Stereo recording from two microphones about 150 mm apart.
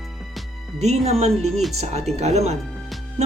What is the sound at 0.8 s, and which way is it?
Speech, 50° right (ahead or behind).